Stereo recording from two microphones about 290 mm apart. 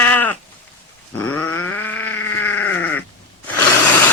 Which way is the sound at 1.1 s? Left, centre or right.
Centre.